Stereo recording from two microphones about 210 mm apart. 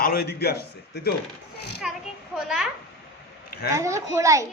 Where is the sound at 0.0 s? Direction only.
45° left (ahead or behind).